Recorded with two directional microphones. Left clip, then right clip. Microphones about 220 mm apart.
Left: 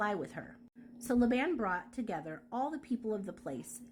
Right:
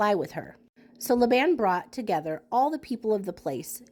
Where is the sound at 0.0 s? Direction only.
30° right (ahead or behind).